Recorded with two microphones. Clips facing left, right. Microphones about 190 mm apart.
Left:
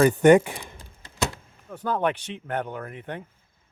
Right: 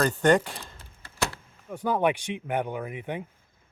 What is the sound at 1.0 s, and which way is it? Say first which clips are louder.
Door: left 2 dB; 20° left (ahead or behind).